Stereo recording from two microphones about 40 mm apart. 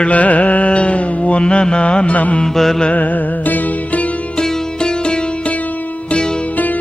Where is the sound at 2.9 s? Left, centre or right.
Left.